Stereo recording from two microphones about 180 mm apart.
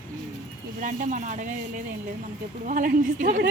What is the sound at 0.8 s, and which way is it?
Speech, 45° right (ahead or behind).